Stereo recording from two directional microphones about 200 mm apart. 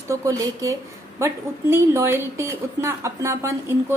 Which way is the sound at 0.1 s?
15° right (ahead or behind).